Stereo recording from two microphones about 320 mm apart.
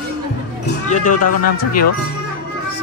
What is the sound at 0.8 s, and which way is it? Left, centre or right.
Speech, left.